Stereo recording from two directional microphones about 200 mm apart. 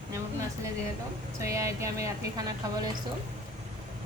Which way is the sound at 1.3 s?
15° right (ahead or behind).